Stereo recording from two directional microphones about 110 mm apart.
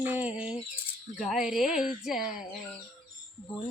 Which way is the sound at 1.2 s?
5° right (ahead or behind).